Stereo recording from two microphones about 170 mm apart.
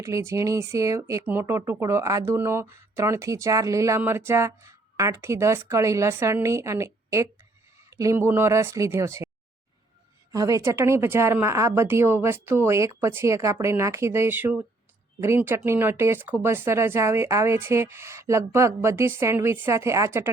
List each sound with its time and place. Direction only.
0.0 s speech: 15° right (ahead or behind)
10.3 s speech: 20° right (ahead or behind)